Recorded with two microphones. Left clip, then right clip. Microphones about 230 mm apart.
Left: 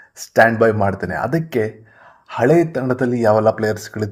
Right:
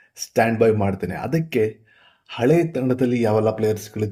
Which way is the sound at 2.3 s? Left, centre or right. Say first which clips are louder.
Left 4 dB; centre.